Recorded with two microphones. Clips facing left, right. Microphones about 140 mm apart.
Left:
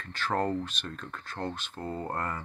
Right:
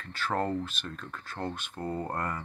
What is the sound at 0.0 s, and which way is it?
Speech, 5° right (ahead or behind).